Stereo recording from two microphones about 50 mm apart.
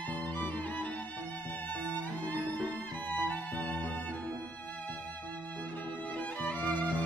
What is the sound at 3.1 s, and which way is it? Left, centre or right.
Music, left.